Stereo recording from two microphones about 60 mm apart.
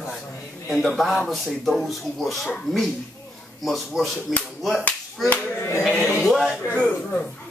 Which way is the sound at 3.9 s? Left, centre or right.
Centre.